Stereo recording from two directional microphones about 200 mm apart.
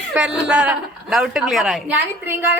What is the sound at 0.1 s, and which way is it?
Speech, 5° right (ahead or behind).